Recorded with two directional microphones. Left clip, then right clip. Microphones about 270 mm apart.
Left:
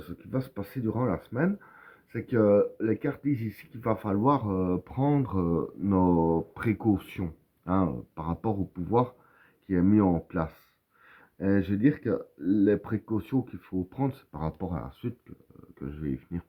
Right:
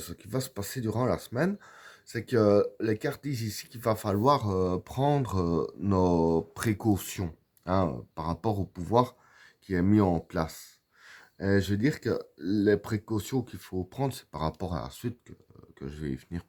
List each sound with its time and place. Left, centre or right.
0.0 s speech: right